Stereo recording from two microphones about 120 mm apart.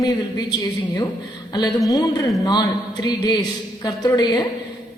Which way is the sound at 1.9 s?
30° left (ahead or behind).